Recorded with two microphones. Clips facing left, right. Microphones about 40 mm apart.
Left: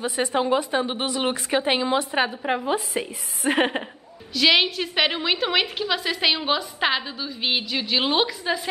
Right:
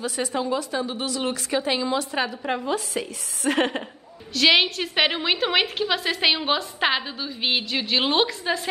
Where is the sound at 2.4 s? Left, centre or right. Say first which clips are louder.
Left 2 dB; centre.